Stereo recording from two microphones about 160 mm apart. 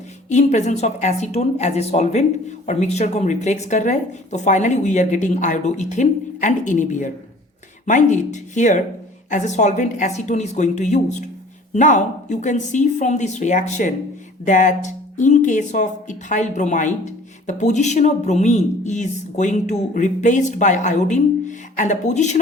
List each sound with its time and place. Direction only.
0.3 s speech: 45° left (ahead or behind)